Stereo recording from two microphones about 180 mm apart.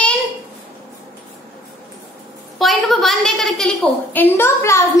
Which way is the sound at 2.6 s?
Centre (ahead or behind).